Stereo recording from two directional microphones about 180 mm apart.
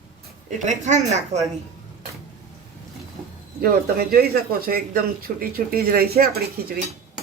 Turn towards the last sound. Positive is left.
turn(degrees=-60)  # may be behind; listen again after turning